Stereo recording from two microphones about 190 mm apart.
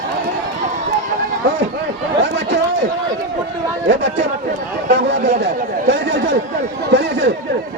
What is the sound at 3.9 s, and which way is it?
Speech, 65° right (ahead or behind).